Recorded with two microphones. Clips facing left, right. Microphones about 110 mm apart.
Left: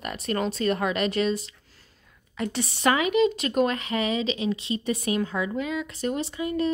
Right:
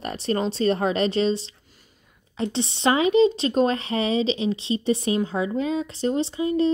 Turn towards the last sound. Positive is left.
turn(degrees=-30)  # may be behind; listen again after turning